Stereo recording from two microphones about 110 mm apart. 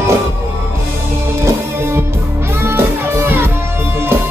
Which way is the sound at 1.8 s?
20° right (ahead or behind).